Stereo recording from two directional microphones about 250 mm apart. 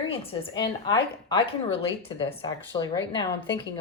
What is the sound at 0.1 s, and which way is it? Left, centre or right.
A woman's voice, left.